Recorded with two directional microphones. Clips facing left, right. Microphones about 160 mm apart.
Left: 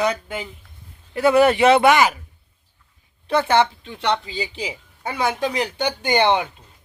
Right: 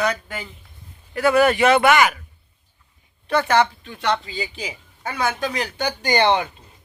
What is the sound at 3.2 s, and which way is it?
A woman's voice, 25° left (ahead or behind).